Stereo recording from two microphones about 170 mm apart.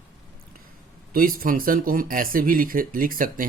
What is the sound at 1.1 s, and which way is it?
Speech, 60° right (ahead or behind).